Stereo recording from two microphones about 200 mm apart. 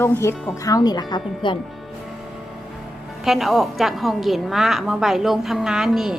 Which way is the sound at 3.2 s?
Centre (ahead or behind).